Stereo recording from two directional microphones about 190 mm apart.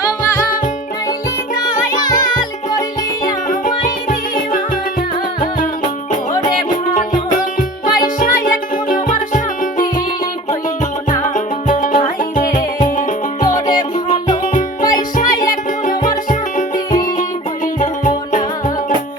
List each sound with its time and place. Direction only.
2.0 s music: 20° left (ahead or behind)
6.9 s music: 40° left (ahead or behind)
11.2 s music: 45° left (ahead or behind)